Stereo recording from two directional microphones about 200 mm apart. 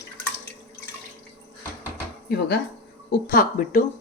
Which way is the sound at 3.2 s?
45° left (ahead or behind).